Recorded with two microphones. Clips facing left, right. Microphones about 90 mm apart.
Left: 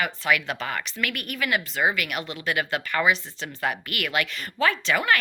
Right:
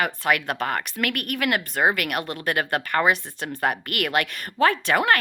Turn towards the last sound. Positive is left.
turn(degrees=-55)  # may be behind; listen again after turning